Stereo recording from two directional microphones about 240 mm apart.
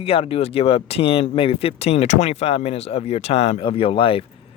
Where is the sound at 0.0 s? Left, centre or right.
Left.